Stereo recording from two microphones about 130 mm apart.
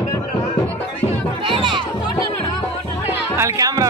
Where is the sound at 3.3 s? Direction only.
25° right (ahead or behind).